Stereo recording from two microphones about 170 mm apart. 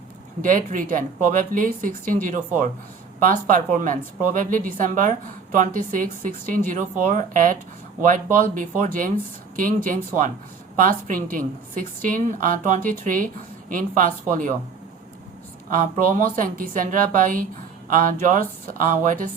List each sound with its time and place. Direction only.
0.4 s a woman's voice: 50° right (ahead or behind)
15.7 s a woman's voice: 50° right (ahead or behind)